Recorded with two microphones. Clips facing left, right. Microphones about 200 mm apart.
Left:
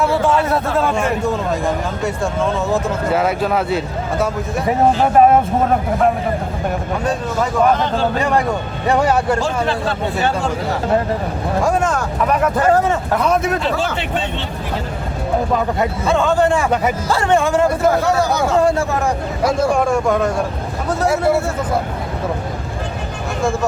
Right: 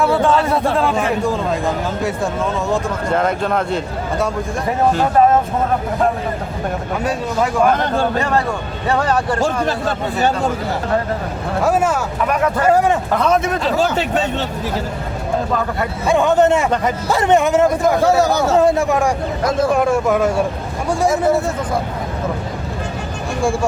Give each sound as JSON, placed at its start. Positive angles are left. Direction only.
{"t": 0.0, "sound": "speech", "side_deg": 0}
{"t": 8.9, "sound": "speech", "side_deg": 15}
{"t": 9.4, "sound": "speech", "side_deg": -45}
{"t": 11.6, "sound": "speech", "side_deg": -5}
{"t": 13.1, "sound": "speech", "side_deg": 0}
{"t": 13.7, "sound": "speech", "side_deg": -40}
{"t": 16.0, "sound": "speech", "side_deg": -15}
{"t": 19.4, "sound": "speech", "side_deg": 10}
{"t": 19.7, "sound": "speech", "side_deg": -5}